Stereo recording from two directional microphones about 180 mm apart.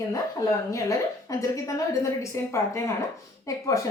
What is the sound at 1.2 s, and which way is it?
A woman's voice, 20° left (ahead or behind).